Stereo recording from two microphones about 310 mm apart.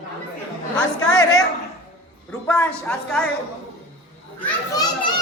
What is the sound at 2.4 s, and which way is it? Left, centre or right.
Speech, centre.